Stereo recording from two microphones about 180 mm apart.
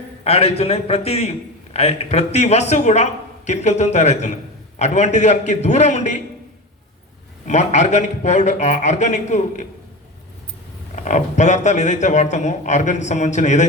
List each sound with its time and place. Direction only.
0.3 s a man's voice: 35° left (ahead or behind)
7.4 s a man's voice: 40° left (ahead or behind)
10.9 s a man's voice: 40° left (ahead or behind)